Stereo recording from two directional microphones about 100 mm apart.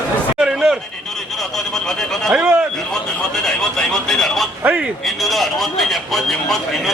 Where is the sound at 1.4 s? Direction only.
5° left (ahead or behind).